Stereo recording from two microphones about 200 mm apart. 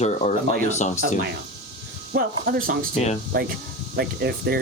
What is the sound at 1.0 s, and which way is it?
Speech, 45° right (ahead or behind).